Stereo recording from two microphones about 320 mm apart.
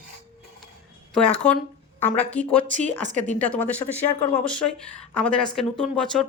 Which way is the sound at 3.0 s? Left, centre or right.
Right.